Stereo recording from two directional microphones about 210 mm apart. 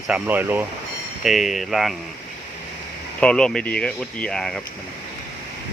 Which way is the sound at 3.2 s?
5° left (ahead or behind).